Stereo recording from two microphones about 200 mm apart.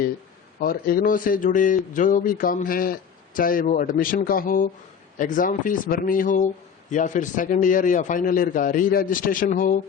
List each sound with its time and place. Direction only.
0.6 s a man's voice: 50° left (ahead or behind)